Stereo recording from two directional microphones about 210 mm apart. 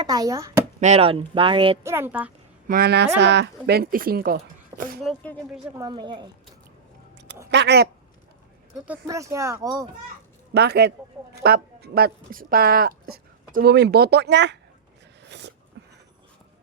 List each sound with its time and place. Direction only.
0.0 s speech: 20° right (ahead or behind)
0.8 s speech: 30° right (ahead or behind)
1.8 s speech: 10° right (ahead or behind)
2.6 s a woman's voice: 45° right (ahead or behind)
4.7 s a sound: 10° right (ahead or behind)
5.0 s speech: 5° left (ahead or behind)
5.5 s speech: 5° right (ahead or behind)
5.8 s speech: 20° right (ahead or behind)
7.5 s speech: 55° right (ahead or behind)
8.9 s speech: 15° right (ahead or behind)
10.5 s a woman's voice: 50° right (ahead or behind)
15.3 s a sound: 55° right (ahead or behind)